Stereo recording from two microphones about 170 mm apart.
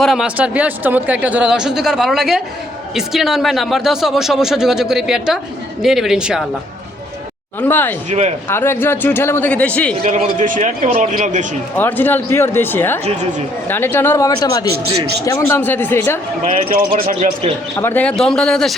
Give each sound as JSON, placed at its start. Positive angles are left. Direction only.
{"t": 0.0, "sound": "speech", "side_deg": 0}
{"t": 7.6, "sound": "speech", "side_deg": 10}
{"t": 10.0, "sound": "a man's voice", "side_deg": -45}
{"t": 11.8, "sound": "speech", "side_deg": 10}
{"t": 16.4, "sound": "a man's voice", "side_deg": -50}
{"t": 17.7, "sound": "speech", "side_deg": 10}